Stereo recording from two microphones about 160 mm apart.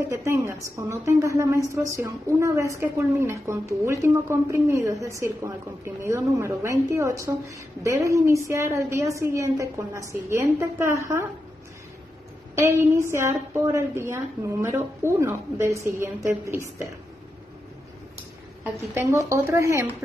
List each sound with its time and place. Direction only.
0.1 s a woman's voice: 15° right (ahead or behind)
12.5 s a woman's voice: 15° right (ahead or behind)
18.6 s a woman's voice: 15° right (ahead or behind)